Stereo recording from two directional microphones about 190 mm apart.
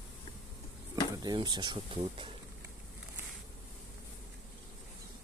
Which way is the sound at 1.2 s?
25° right (ahead or behind).